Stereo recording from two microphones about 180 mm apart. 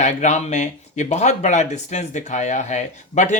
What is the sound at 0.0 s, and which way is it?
Speech, 40° left (ahead or behind).